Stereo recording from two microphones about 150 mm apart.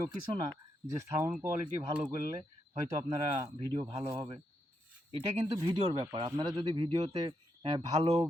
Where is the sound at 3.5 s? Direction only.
30° right (ahead or behind).